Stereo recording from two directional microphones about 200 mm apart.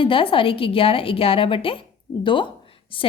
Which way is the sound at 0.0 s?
25° left (ahead or behind).